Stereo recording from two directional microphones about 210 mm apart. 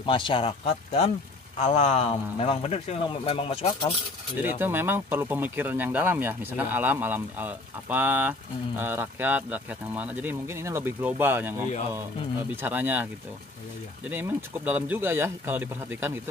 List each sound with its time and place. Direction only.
0.0 s speech: 25° left (ahead or behind)
4.4 s speech: 10° right (ahead or behind)